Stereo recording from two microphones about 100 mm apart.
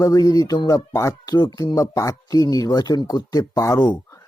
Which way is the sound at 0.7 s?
30° left (ahead or behind).